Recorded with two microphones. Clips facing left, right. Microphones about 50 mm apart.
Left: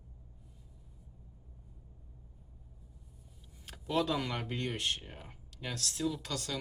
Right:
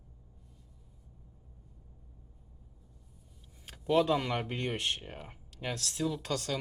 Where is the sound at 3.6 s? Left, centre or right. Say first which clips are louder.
Even; centre.